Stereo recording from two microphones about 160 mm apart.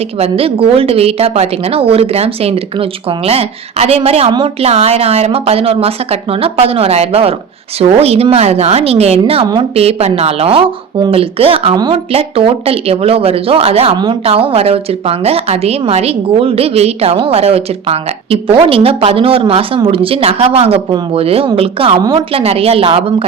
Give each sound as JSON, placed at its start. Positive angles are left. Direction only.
{"t": 0.2, "sound": "a woman's voice", "side_deg": -35}